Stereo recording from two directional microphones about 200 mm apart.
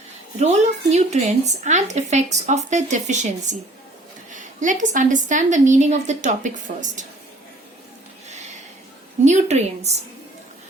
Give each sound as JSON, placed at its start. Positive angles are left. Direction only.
{"t": 0.3, "sound": "speech", "side_deg": -35}
{"t": 9.2, "sound": "speech", "side_deg": -35}